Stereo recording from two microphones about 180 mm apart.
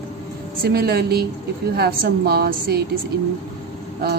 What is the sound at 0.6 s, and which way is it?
Speech, 60° right (ahead or behind).